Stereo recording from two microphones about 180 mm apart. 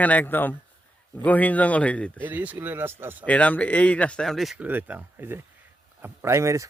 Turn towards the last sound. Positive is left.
turn(degrees=-15)  # may be behind; listen again after turning